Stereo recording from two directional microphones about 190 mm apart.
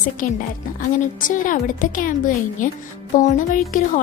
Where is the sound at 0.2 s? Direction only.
45° left (ahead or behind).